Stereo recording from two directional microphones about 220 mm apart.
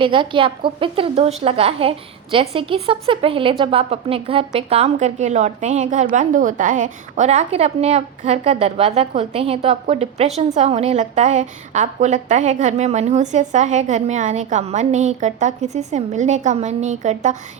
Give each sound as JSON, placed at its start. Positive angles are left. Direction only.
{"t": 0.0, "sound": "a woman's voice", "side_deg": -20}